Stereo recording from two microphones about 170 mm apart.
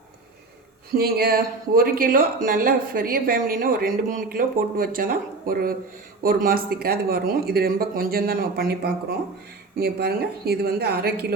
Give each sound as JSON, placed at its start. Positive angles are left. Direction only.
{"t": 0.9, "sound": "a woman's voice", "side_deg": -65}